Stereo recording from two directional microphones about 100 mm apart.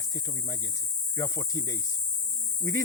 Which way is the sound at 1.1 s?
35° left (ahead or behind).